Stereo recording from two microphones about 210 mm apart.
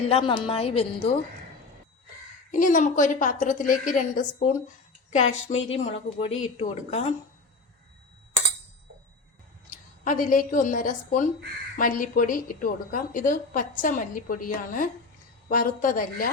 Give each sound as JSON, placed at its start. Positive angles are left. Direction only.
{"t": 0.1, "sound": "a woman's voice", "side_deg": 25}
{"t": 2.5, "sound": "a woman's voice", "side_deg": 40}
{"t": 9.6, "sound": "a woman's voice", "side_deg": 40}